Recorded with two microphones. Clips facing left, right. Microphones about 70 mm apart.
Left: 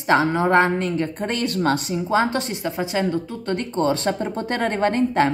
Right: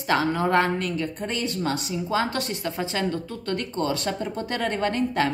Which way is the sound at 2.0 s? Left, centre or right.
Left.